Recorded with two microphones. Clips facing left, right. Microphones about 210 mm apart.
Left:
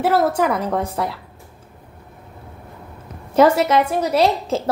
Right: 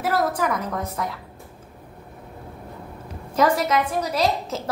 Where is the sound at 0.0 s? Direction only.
30° left (ahead or behind).